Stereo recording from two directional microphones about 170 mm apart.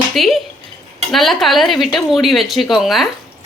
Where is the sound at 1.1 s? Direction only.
Centre (ahead or behind).